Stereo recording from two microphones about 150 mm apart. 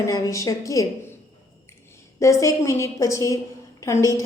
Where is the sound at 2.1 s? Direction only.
20° left (ahead or behind).